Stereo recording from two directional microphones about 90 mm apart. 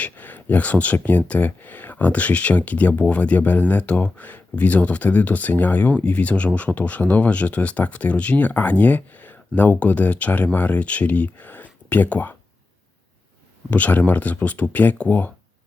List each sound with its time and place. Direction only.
0.0 s speech: 20° left (ahead or behind)
13.7 s speech: 20° left (ahead or behind)